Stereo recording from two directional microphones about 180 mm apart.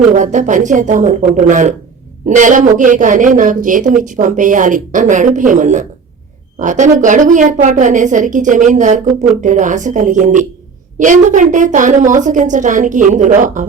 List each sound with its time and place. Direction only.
0.1 s a woman's voice: 45° right (ahead or behind)
9.0 s speech: centre (ahead or behind)
9.4 s a woman's voice: 45° right (ahead or behind)